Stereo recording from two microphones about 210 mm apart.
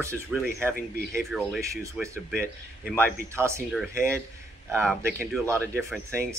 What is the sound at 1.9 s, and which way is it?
Speech, 10° right (ahead or behind).